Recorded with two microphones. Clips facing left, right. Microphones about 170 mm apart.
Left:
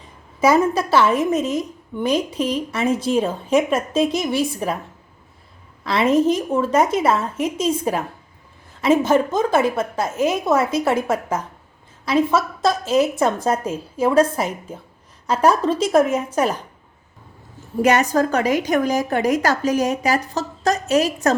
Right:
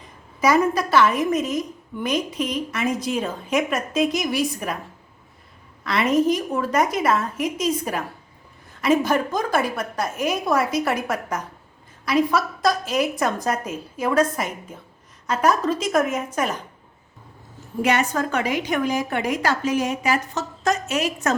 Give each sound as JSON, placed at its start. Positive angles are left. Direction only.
{"t": 0.3, "sound": "a woman's voice", "side_deg": 30}
{"t": 5.8, "sound": "a woman's voice", "side_deg": 30}
{"t": 17.8, "sound": "a woman's voice", "side_deg": 40}